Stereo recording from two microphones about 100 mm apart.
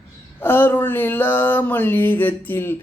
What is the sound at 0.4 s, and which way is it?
Mantra, 20° left (ahead or behind).